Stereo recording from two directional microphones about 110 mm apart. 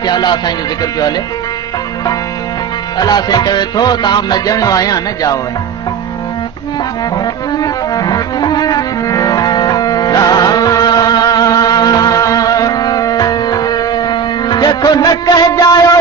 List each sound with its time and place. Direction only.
0.0 s music: 40° left (ahead or behind)
3.0 s music: 40° left (ahead or behind)
7.5 s music: 35° left (ahead or behind)